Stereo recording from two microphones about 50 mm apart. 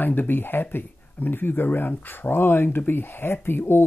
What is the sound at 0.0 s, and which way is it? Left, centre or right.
Speech, left.